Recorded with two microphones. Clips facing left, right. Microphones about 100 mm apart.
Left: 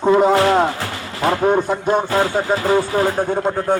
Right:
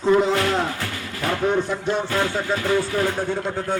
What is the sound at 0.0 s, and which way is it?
Speech, 45° left (ahead or behind).